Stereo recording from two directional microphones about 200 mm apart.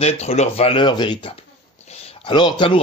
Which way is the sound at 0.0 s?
35° left (ahead or behind).